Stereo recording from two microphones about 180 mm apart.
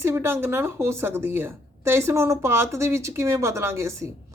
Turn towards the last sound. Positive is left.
turn(degrees=-15)  # may be behind; listen again after turning